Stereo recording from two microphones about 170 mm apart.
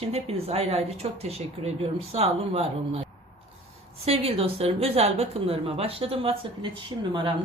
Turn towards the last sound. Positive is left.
turn(degrees=-30)  # may be behind; listen again after turning